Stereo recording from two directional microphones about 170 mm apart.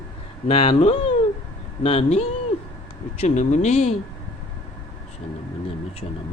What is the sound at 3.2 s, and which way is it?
Speech, 45° left (ahead or behind).